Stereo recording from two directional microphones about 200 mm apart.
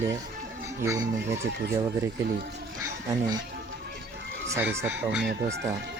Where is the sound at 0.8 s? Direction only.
15° right (ahead or behind).